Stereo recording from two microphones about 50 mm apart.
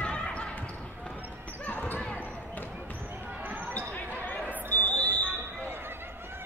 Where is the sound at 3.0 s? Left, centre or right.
Right.